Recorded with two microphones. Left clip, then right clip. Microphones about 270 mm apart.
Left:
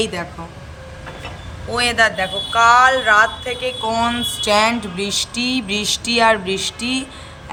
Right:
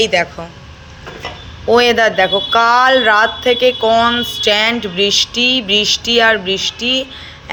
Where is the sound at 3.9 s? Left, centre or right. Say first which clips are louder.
Right 7 dB; centre.